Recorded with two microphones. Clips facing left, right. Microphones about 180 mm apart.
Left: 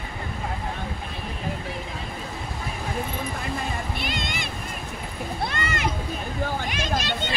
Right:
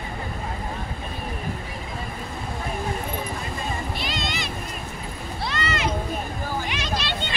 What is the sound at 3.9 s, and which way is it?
Music, 55° left (ahead or behind).